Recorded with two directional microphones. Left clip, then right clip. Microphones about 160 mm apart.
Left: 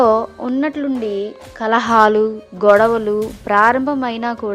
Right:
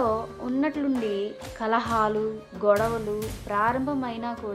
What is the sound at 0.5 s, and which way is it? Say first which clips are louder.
A woman's voice: left 6 dB; 35° left (ahead or behind).